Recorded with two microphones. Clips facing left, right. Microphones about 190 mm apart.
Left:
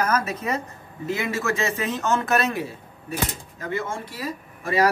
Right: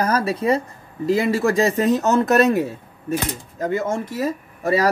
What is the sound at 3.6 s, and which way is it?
Speech, 45° right (ahead or behind).